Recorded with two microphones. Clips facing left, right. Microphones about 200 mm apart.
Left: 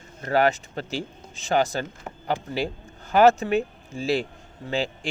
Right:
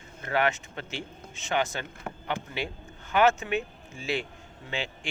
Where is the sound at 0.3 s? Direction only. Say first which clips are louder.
Left 6 dB; 35° left (ahead or behind).